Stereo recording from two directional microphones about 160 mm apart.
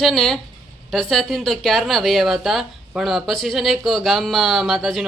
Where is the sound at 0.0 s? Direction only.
Centre (ahead or behind).